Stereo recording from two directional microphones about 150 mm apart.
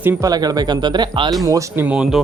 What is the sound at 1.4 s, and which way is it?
Speech, 15° right (ahead or behind).